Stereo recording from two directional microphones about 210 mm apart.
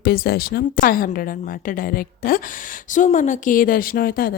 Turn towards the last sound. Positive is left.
turn(degrees=45)  # may be behind; listen again after turning